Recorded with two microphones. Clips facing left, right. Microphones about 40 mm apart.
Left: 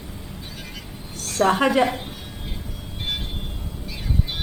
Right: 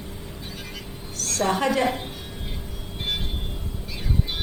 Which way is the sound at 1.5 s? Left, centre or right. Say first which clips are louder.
Left 4 dB; left.